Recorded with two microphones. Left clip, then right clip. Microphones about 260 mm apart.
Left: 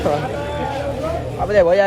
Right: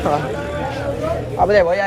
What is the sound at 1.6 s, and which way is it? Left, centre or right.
Speech, left.